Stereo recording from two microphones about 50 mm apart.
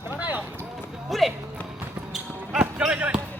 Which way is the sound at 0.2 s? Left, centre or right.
Right.